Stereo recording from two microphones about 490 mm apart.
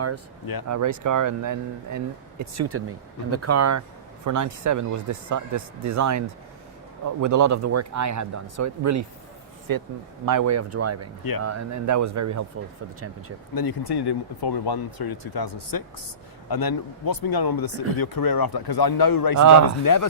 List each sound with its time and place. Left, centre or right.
0.7 s a man's voice: right
13.5 s speech: left
19.4 s speech: right
19.8 s speech: left